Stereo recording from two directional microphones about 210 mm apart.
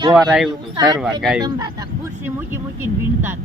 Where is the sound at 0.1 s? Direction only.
5° right (ahead or behind).